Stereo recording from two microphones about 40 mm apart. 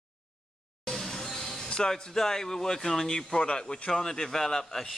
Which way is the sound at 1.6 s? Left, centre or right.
Centre.